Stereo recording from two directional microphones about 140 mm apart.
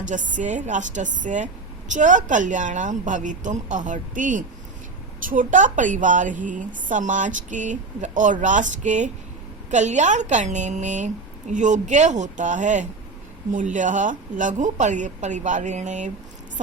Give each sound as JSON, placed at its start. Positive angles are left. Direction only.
{"t": 0.1, "sound": "a woman's voice", "side_deg": -65}